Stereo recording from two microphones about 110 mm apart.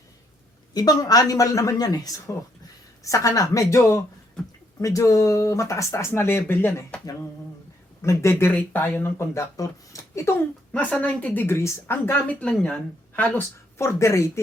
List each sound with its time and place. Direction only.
0.7 s speech: 35° left (ahead or behind); by 6.8 s 20° left (ahead or behind)
8.0 s speech: 25° left (ahead or behind)
10.7 s a woman's voice: 10° left (ahead or behind)
12.4 s a woman's voice: 10° left (ahead or behind)
13.7 s speech: 25° left (ahead or behind)